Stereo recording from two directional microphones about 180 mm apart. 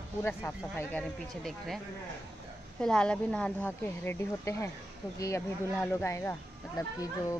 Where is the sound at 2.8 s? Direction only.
5° left (ahead or behind).